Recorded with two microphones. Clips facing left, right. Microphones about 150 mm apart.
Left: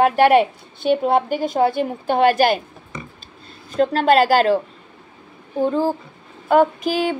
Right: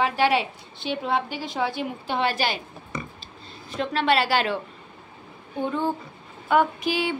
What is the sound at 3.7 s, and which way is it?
Mantra, 40° left (ahead or behind).